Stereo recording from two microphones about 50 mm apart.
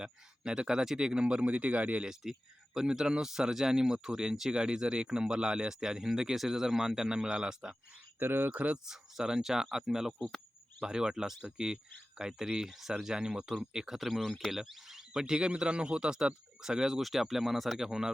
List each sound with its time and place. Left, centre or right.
0.0 s a man's voice: centre
2.7 s speech: centre
8.2 s speech: right
8.9 s speech: centre